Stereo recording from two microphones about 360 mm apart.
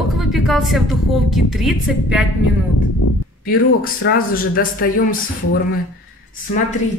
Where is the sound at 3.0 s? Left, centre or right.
Left.